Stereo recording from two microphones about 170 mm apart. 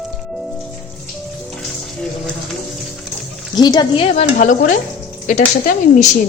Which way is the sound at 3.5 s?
25° left (ahead or behind).